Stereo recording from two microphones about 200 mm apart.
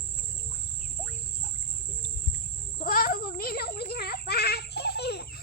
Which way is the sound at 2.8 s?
45° left (ahead or behind).